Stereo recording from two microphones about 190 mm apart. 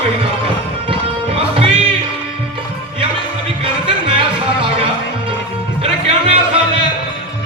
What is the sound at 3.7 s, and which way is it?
Music, 25° right (ahead or behind).